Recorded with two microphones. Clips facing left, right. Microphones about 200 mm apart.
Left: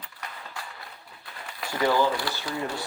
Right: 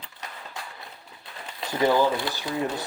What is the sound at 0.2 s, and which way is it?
Run, 20° right (ahead or behind).